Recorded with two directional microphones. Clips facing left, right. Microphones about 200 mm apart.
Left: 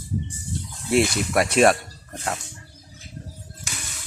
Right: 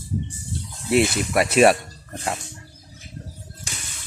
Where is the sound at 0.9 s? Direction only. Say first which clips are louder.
Right 1 dB; centre (ahead or behind).